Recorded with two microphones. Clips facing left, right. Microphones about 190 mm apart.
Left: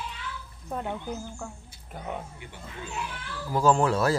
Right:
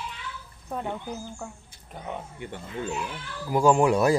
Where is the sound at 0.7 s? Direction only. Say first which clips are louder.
Right 1 dB; centre (ahead or behind).